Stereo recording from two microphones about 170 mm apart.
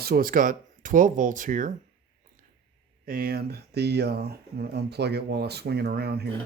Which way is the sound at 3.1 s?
60° right (ahead or behind).